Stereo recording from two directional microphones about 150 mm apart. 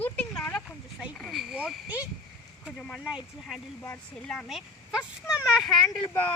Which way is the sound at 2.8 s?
5° left (ahead or behind).